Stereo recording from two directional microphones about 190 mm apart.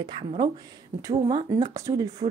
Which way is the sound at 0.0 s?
30° right (ahead or behind).